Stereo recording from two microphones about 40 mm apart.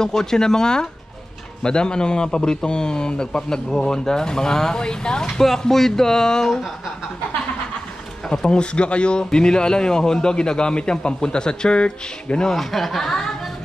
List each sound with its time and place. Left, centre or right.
0.0 s speech: centre
5.4 s speech: centre
8.3 s speech: left
12.4 s speech: centre